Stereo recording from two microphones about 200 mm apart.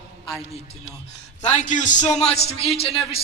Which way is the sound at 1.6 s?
40° left (ahead or behind).